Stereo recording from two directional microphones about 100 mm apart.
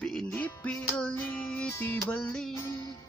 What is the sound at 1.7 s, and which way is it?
Music, 25° left (ahead or behind).